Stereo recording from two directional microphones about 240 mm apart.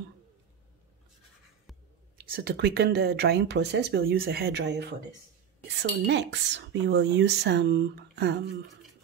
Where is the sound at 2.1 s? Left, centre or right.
Right.